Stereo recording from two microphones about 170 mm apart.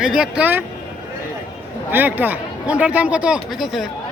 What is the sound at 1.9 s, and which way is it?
Speech, 10° right (ahead or behind).